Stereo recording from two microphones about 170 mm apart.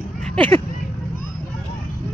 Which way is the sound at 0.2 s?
10° left (ahead or behind).